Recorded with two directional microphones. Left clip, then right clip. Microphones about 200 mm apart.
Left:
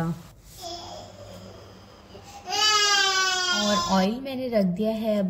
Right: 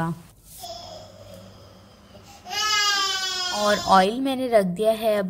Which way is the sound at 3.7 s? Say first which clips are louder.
Right 6 dB; 40° right (ahead or behind).